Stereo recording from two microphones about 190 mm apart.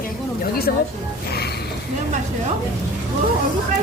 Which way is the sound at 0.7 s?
55° left (ahead or behind).